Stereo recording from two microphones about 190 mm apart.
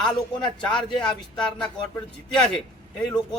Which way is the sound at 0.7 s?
25° left (ahead or behind).